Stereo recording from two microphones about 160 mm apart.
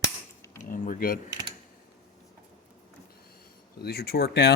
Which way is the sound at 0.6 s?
55° left (ahead or behind).